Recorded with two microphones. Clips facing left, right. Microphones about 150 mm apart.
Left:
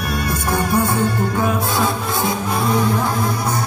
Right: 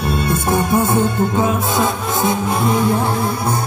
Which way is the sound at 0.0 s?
25° right (ahead or behind).